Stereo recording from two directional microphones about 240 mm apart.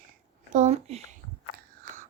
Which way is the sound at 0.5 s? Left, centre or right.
Right.